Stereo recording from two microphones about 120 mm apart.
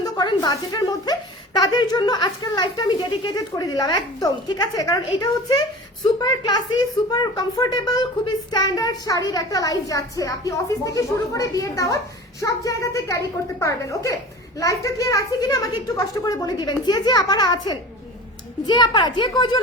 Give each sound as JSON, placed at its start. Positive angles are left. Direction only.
{"t": 0.0, "sound": "a woman's voice", "side_deg": 35}